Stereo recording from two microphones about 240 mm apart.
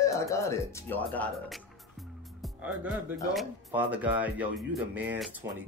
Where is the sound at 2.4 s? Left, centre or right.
Centre.